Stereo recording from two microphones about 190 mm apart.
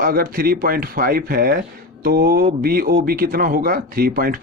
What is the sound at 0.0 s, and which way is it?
Speech, 50° right (ahead or behind).